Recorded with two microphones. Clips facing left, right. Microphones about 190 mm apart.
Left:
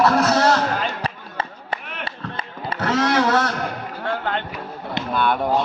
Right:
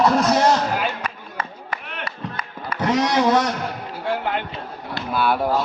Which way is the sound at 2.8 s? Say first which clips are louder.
Right 1 dB; 15° right (ahead or behind).